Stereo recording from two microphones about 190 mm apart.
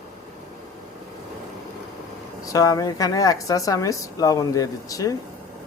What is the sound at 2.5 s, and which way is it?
Speech, 20° left (ahead or behind).